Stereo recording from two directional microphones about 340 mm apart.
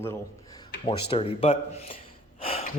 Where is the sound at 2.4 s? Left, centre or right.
Centre.